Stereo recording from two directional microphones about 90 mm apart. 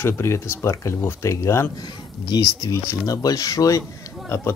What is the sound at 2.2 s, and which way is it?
Speech, 45° left (ahead or behind).